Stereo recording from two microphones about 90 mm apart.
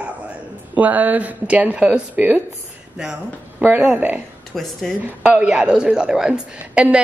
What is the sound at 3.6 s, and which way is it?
Speech, 15° right (ahead or behind).